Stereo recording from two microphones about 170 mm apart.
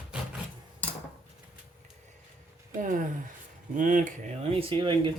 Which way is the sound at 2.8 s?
50° right (ahead or behind).